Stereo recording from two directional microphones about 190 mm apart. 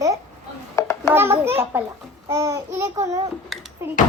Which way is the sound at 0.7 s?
15° left (ahead or behind).